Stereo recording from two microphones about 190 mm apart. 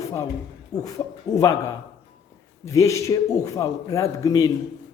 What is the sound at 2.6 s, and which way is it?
A man's voice, 15° left (ahead or behind).